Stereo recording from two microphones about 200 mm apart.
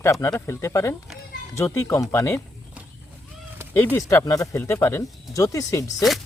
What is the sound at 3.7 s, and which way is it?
Speech, 10° left (ahead or behind).